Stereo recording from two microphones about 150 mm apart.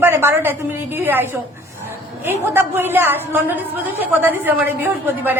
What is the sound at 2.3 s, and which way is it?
A man's voice, 15° right (ahead or behind).